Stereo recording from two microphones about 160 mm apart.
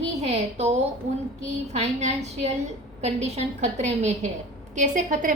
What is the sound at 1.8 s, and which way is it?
A woman's voice, 45° right (ahead or behind).